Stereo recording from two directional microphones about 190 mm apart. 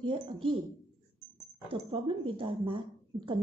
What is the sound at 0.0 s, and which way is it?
Speech, 25° right (ahead or behind).